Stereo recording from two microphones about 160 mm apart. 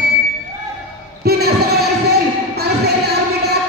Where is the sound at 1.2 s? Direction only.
80° right.